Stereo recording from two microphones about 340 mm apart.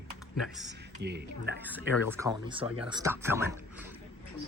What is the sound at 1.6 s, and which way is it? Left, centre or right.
Speech, centre.